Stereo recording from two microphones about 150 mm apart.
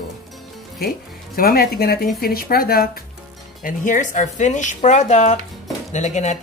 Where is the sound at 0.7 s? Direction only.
85° left.